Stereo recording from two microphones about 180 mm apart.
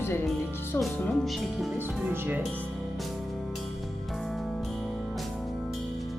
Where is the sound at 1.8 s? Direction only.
10° right (ahead or behind).